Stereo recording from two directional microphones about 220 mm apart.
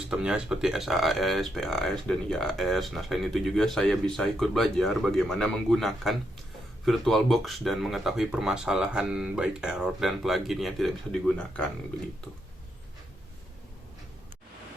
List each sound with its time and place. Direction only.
0.1 s speech: 5° right (ahead or behind)